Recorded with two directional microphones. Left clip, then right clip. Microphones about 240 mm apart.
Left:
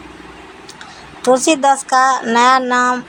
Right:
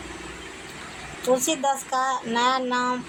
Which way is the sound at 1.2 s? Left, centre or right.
Left.